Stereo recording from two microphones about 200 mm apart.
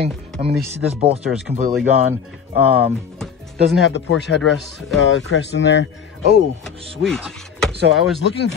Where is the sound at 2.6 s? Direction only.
10° right (ahead or behind).